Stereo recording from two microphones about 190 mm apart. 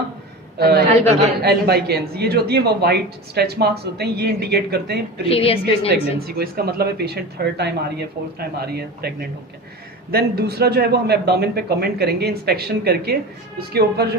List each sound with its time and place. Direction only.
0.6 s speech: 55° right (ahead or behind)
5.2 s a woman's voice: 30° left (ahead or behind)
6.1 s speech: 55° right (ahead or behind)